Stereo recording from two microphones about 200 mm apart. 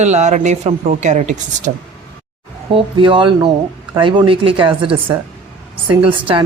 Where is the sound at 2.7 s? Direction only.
25° right (ahead or behind).